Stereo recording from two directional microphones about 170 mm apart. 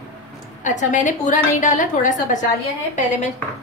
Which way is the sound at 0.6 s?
50° left (ahead or behind).